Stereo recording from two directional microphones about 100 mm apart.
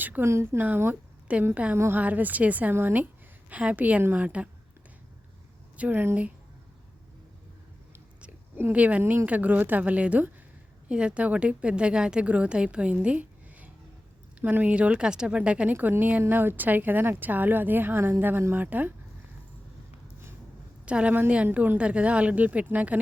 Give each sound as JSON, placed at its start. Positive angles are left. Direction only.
{"t": 0.0, "sound": "a woman's voice", "side_deg": -20}
{"t": 5.7, "sound": "a woman's voice", "side_deg": -15}
{"t": 8.2, "sound": "a woman's voice", "side_deg": -20}
{"t": 20.8, "sound": "a woman's voice", "side_deg": -10}